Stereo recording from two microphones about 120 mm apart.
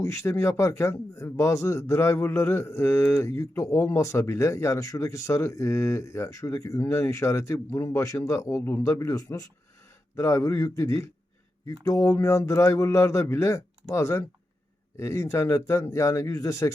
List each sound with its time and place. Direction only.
0.0 s speech: 25° left (ahead or behind)